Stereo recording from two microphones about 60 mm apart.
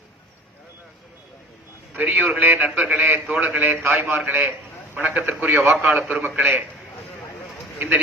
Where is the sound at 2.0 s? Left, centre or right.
Right.